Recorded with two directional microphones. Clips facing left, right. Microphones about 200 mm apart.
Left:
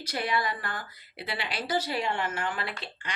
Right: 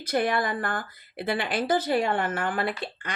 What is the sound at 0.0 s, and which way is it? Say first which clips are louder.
Speech: right 5 dB; 50° right (ahead or behind).